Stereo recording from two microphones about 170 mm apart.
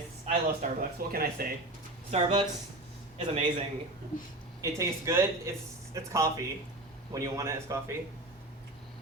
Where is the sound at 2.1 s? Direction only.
30° right (ahead or behind).